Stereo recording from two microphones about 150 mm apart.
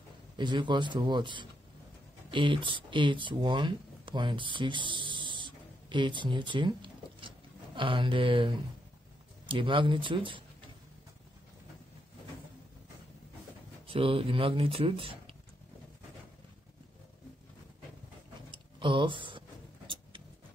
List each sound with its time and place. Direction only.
0.4 s speech: 30° right (ahead or behind)
9.5 s speech: 35° right (ahead or behind)
13.8 s speech: 35° right (ahead or behind)
18.5 s a sound: 35° right (ahead or behind)